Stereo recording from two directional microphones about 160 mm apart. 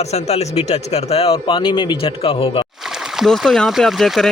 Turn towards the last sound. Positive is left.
turn(degrees=0)  # may be behind; listen again after turning